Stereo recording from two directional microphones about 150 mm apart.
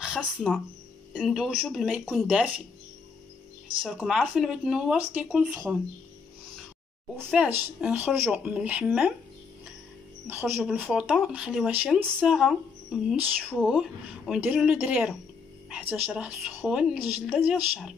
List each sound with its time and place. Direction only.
0.0 s speech: 5° right (ahead or behind)
3.8 s speech: centre (ahead or behind)
7.2 s a woman's voice: 5° right (ahead or behind)
10.2 s a woman's voice: 15° right (ahead or behind)
10.6 s a woman's voice: centre (ahead or behind)